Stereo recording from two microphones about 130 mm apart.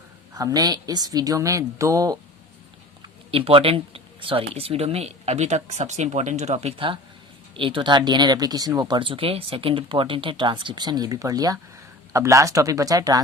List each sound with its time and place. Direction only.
0.3 s a woman's voice: 30° right (ahead or behind)
3.3 s a woman's voice: 45° right (ahead or behind); by 13.2 s 25° right (ahead or behind)